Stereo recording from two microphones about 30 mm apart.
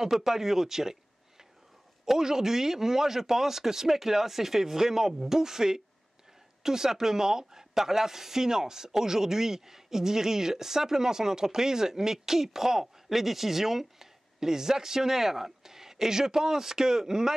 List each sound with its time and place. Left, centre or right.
0.0 s a woman's voice: centre
2.0 s a woman's voice: centre